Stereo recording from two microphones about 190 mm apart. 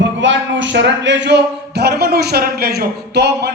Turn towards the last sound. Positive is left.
turn(degrees=-60)  # may be behind; listen again after turning